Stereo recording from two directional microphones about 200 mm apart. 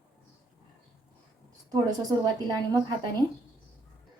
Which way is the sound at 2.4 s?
20° right (ahead or behind).